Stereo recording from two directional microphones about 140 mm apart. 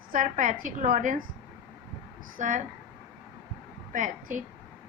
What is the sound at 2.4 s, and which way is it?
Speech, 60° right (ahead or behind).